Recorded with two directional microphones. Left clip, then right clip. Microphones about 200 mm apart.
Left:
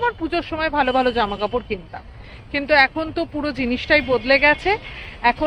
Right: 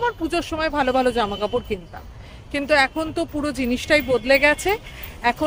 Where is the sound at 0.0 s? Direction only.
20° right (ahead or behind).